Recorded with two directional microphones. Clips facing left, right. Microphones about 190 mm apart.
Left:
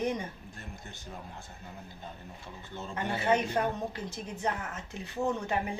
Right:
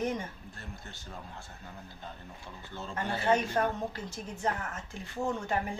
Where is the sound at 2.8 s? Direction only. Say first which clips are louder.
Left 1 dB; 20° left (ahead or behind).